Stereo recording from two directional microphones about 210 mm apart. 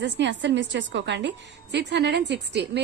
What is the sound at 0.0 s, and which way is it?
A woman's voice, 60° right (ahead or behind).